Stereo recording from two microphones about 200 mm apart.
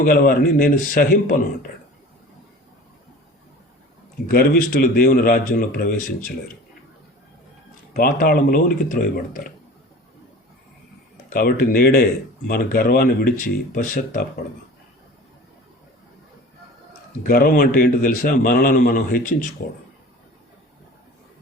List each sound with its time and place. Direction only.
0.0 s a man's voice: 45° left (ahead or behind)
4.3 s a man's voice: 45° left (ahead or behind)
7.9 s a man's voice: 45° left (ahead or behind)
11.3 s a man's voice: 45° left (ahead or behind)
17.2 s a man's voice: 45° left (ahead or behind)